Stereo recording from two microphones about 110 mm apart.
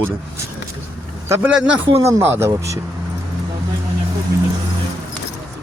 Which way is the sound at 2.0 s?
25° right (ahead or behind).